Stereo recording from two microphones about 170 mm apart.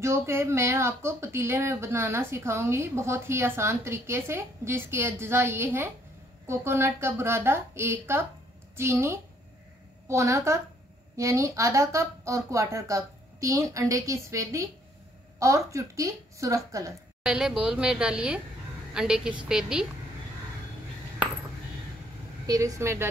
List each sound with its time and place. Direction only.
0.0 s speech: 15° right (ahead or behind)
17.2 s a woman's voice: 5° right (ahead or behind)
22.5 s speech: 20° right (ahead or behind)